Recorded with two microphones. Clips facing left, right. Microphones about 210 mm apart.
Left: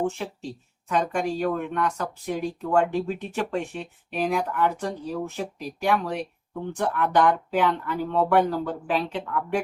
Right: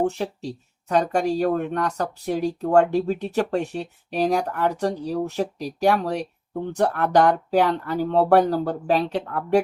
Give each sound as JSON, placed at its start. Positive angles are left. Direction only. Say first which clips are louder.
{"t": 0.0, "sound": "speech", "louder": "right 4 dB", "side_deg": -40}